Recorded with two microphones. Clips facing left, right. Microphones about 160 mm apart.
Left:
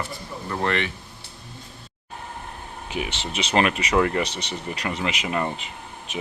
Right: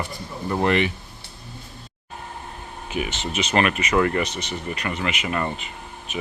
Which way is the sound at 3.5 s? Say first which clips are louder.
Even; 25° left (ahead or behind).